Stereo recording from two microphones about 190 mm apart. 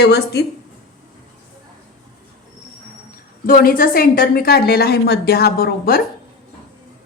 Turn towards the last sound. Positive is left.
turn(degrees=55)  # may be behind; listen again after turning